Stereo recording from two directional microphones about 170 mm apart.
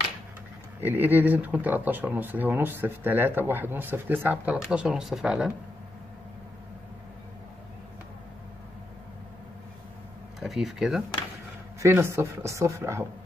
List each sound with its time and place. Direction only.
0.7 s speech: 10° right (ahead or behind)
10.4 s speech: centre (ahead or behind)
11.8 s speech: 15° right (ahead or behind)